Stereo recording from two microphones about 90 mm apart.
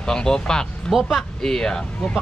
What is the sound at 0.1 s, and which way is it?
Speech, 10° left (ahead or behind).